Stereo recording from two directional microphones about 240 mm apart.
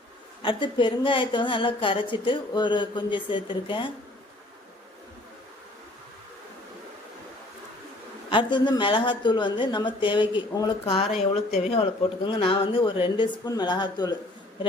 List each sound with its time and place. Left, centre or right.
0.4 s speech: centre
8.3 s speech: centre